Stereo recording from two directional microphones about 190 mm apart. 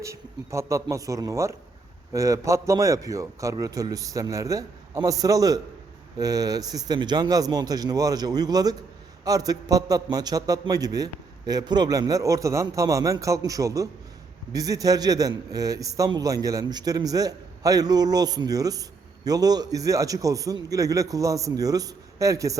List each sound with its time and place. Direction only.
0.0 s a man's voice: 15° right (ahead or behind)